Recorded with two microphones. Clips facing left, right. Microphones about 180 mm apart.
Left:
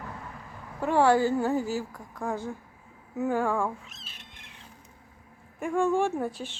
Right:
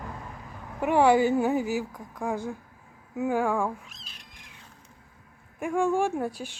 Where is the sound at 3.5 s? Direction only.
Centre (ahead or behind).